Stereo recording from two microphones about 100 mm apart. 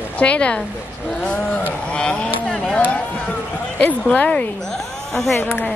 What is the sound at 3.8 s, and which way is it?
Speech, 10° left (ahead or behind).